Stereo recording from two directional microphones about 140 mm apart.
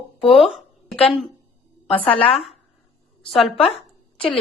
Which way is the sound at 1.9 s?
40° left (ahead or behind).